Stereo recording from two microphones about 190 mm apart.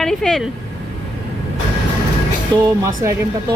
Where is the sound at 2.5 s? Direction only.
20° right (ahead or behind).